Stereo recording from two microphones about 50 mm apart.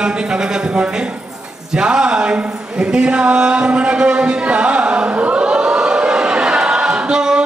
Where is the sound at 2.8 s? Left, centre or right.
Centre.